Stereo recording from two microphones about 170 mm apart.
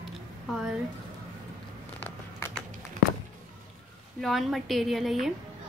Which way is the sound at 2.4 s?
15° left (ahead or behind).